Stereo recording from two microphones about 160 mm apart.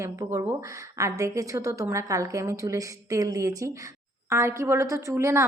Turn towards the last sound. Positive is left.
turn(degrees=-15)  # may be behind; listen again after turning